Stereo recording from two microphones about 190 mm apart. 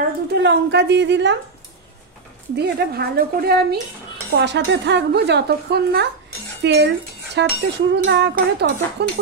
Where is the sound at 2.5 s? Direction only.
60° right (ahead or behind).